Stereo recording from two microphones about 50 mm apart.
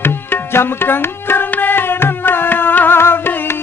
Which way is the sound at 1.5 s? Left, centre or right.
Left.